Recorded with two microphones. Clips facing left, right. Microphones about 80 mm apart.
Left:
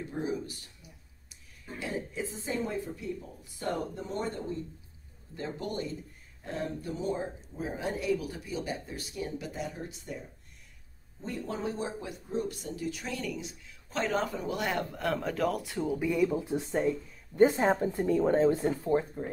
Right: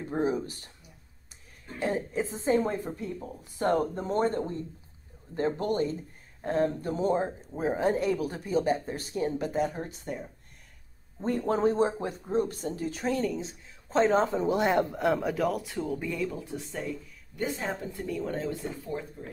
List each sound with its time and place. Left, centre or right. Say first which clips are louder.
0.1 s speech: right 7 dB; right
1.8 s a woman's voice: right 6 dB; right; by 15.3 s centre
15.3 s speech: right 1 dB; centre
16.3 s speech: left 5 dB; left